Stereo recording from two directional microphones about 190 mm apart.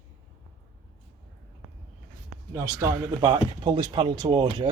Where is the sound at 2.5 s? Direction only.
20° right (ahead or behind).